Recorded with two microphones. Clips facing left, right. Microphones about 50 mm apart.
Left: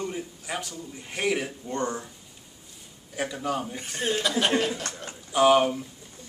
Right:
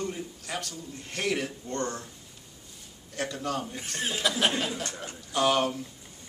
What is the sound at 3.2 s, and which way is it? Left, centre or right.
Speech, centre.